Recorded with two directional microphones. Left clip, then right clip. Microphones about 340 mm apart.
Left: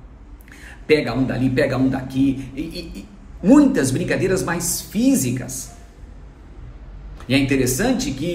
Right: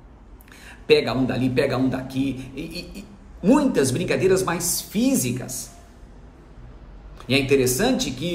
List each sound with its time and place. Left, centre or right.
0.5 s a man's voice: centre
7.2 s a man's voice: centre